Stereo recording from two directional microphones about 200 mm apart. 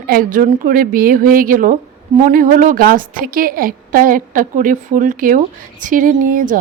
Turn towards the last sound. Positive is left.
turn(degrees=-45)  # may be behind; listen again after turning